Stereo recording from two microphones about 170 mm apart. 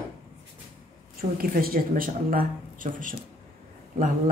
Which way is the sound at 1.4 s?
60° right (ahead or behind).